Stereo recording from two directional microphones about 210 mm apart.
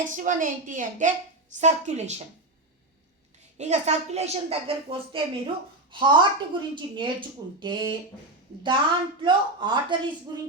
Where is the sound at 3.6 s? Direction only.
30° right (ahead or behind).